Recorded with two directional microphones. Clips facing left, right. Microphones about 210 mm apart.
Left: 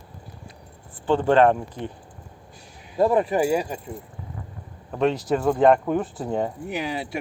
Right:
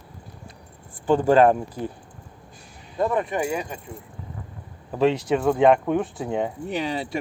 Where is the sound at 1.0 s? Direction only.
10° right (ahead or behind).